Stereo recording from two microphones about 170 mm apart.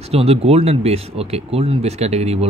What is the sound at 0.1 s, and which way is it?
A man's voice, 35° right (ahead or behind).